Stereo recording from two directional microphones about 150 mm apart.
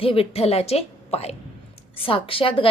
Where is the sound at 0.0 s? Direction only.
40° left (ahead or behind).